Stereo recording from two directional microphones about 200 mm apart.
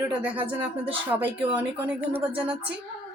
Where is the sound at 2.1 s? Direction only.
25° right (ahead or behind).